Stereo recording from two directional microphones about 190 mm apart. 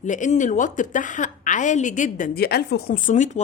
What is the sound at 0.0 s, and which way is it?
A woman's voice, 40° left (ahead or behind).